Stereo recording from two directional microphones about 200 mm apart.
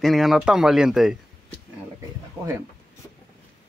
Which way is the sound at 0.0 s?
Centre (ahead or behind).